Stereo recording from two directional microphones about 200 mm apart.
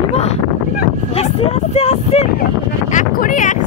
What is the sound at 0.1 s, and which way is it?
Boat, 30° left (ahead or behind).